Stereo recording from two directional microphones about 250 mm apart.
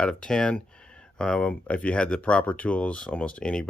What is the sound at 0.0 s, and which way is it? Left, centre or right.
Speech, centre.